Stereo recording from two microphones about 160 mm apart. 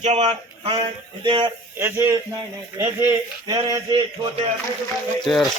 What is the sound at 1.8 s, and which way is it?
Speech, 15° right (ahead or behind).